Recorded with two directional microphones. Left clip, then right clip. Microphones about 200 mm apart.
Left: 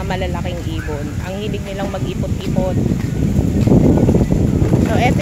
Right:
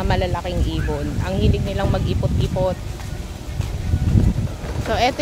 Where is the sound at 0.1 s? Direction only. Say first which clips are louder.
Even; 10° right (ahead or behind).